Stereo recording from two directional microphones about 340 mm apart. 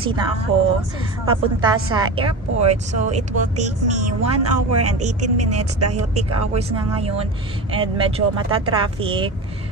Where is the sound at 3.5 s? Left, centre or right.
Right.